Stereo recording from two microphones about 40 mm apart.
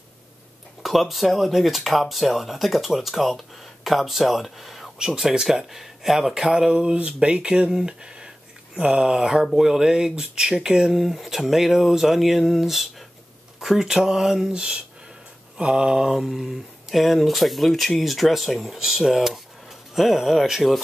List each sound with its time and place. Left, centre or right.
0.8 s speech: centre
4.9 s speech: centre
10.9 s speech: centre
14.5 s speech: right; by 20.8 s centre